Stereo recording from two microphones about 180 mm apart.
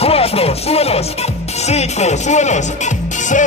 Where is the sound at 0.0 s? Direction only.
35° left (ahead or behind).